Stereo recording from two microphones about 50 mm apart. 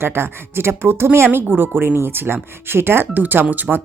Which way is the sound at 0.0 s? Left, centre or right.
Right.